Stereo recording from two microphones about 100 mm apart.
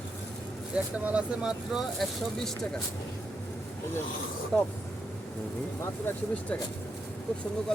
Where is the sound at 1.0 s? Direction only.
10° right (ahead or behind).